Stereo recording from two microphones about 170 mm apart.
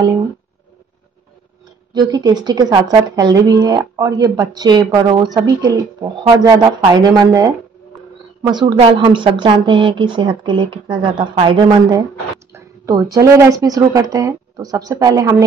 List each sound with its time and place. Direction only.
2.0 s speech: 20° right (ahead or behind)